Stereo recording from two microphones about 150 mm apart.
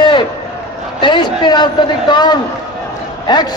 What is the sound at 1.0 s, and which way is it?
A man's voice, 30° left (ahead or behind).